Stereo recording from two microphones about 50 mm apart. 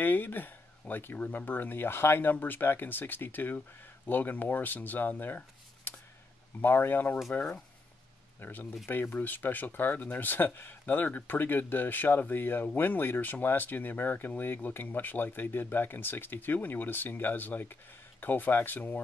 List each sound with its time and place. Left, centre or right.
0.0 s speech: left
5.9 s a sound: left
6.6 s speech: left
8.4 s speech: left